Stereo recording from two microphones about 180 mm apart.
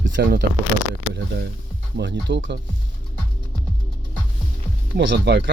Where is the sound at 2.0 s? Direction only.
75° right (ahead or behind).